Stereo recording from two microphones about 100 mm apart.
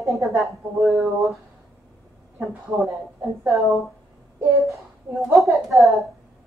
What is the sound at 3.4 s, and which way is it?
Speech, 30° right (ahead or behind).